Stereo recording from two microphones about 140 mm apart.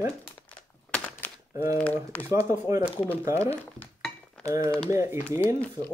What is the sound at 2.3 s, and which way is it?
Speech, 20° right (ahead or behind).